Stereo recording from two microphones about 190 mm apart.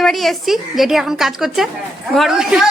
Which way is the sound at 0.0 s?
Centre (ahead or behind).